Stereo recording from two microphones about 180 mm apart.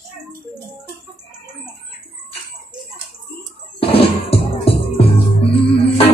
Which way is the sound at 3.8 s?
30° left (ahead or behind).